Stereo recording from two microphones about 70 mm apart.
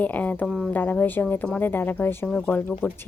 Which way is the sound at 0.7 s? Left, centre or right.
Left.